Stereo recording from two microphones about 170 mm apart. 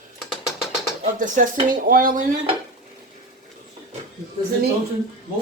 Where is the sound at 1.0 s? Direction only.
50° right (ahead or behind).